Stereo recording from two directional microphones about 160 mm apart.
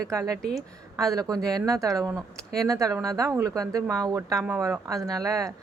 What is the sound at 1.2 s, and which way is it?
Speech, 25° right (ahead or behind).